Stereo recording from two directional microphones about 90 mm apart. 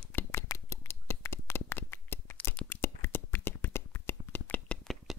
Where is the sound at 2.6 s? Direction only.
25° left (ahead or behind).